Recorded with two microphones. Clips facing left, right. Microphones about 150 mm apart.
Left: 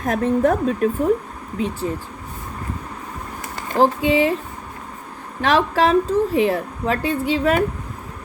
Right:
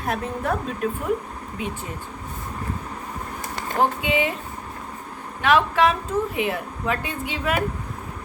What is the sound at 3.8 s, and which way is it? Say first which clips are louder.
Speech: left 6 dB; 35° left (ahead or behind).